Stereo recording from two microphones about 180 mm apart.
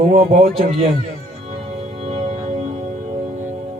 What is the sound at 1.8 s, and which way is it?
Music, 35° right (ahead or behind).